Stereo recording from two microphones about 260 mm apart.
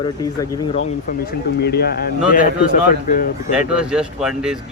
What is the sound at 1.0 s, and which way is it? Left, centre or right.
Speech, left.